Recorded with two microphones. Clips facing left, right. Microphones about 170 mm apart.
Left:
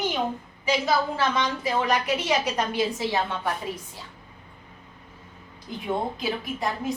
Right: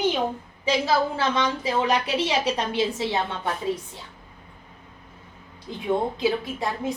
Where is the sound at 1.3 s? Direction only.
25° right (ahead or behind).